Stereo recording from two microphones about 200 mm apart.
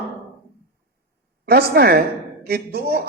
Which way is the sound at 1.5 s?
50° right (ahead or behind).